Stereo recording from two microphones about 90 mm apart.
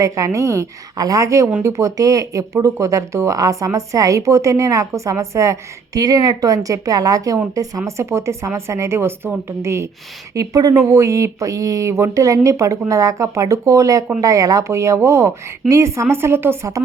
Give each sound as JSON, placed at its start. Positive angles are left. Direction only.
{"t": 0.0, "sound": "speech", "side_deg": -35}
{"t": 10.3, "sound": "speech", "side_deg": -45}